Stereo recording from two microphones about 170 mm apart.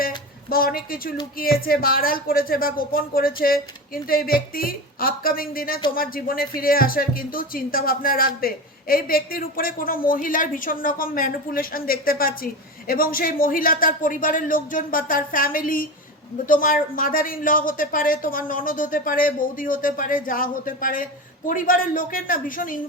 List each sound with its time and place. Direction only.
0.5 s a woman's voice: 60° left (ahead or behind)